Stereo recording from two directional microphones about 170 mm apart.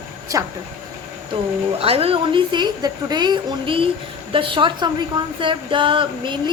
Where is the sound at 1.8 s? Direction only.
35° right (ahead or behind).